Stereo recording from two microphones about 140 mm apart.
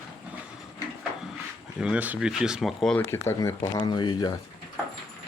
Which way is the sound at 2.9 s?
20° left (ahead or behind).